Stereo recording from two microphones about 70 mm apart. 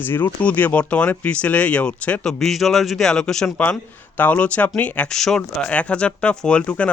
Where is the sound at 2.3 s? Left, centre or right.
Centre.